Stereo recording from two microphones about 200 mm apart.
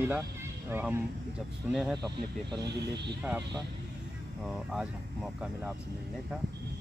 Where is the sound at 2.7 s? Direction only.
55° right (ahead or behind).